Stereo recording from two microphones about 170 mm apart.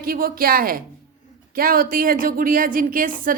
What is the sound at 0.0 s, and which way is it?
A woman's voice, 60° right (ahead or behind).